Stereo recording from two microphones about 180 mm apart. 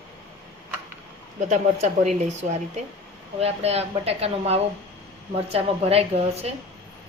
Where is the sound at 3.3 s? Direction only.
35° right (ahead or behind).